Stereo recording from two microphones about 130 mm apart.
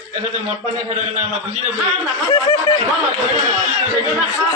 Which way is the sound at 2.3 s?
35° left (ahead or behind).